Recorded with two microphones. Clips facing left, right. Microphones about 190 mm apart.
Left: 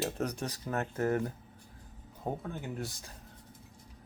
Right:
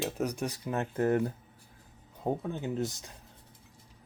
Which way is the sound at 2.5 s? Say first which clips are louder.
Right 6 dB; 20° right (ahead or behind).